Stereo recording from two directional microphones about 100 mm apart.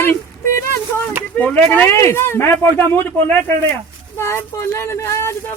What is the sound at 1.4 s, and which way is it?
A man's voice, 10° left (ahead or behind).